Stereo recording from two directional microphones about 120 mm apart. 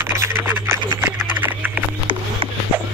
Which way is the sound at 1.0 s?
15° right (ahead or behind).